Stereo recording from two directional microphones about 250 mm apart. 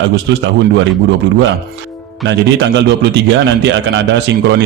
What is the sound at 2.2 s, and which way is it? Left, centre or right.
A man's voice, right.